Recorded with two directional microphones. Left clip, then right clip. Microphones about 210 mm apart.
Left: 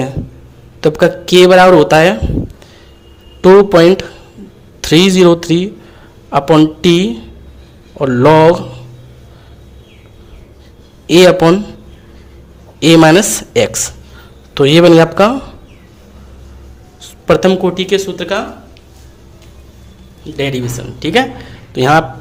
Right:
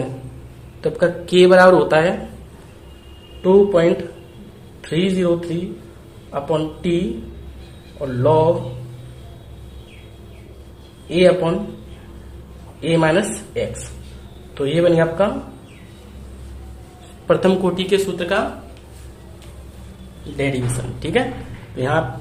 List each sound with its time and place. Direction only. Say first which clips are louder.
0.8 s speech: left 8 dB; 40° left (ahead or behind)
3.4 s speech: left 8 dB; 50° left (ahead or behind)
11.1 s speech: left 8 dB; 55° left (ahead or behind)
12.8 s speech: left 10 dB; 50° left (ahead or behind)
17.2 s speech: left 6 dB; 35° left (ahead or behind)
20.3 s speech: left 5 dB; 30° left (ahead or behind)
21.8 s speech: left 10 dB; 45° left (ahead or behind)